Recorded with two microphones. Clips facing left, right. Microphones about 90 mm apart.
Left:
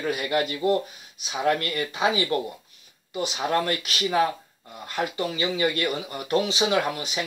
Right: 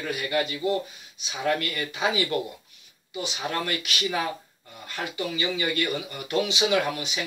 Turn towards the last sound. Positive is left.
turn(degrees=35)  # may be behind; listen again after turning